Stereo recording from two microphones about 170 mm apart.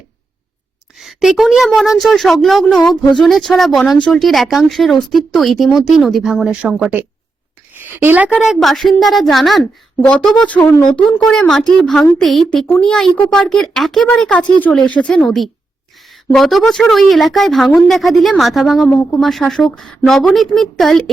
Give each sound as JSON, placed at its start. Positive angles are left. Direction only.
{"t": 0.9, "sound": "a woman's voice", "side_deg": 0}
{"t": 10.6, "sound": "speech", "side_deg": 15}
{"t": 10.9, "sound": "a woman's voice", "side_deg": 5}